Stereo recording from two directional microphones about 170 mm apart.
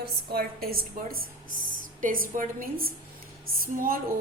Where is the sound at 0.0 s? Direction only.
65° right (ahead or behind).